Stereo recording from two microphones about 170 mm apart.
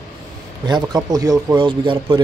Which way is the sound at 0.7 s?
25° right (ahead or behind).